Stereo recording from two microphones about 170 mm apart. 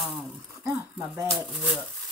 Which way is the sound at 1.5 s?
Centre (ahead or behind).